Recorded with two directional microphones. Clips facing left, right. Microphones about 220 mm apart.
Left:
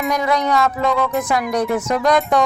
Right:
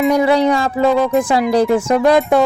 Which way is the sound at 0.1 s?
30° right (ahead or behind).